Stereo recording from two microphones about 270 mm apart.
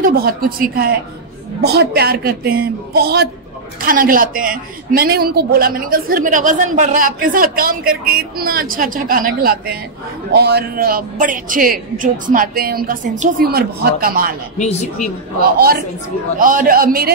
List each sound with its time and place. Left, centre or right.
0.0 s a woman's voice: right
14.6 s speech: left
15.5 s a woman's voice: right